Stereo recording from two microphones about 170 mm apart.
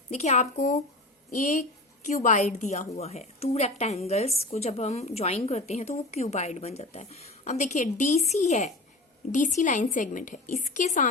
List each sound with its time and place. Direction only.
0.1 s a woman's voice: 40° left (ahead or behind)